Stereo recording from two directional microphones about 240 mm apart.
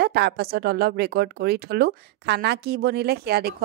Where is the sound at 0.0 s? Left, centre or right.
Right.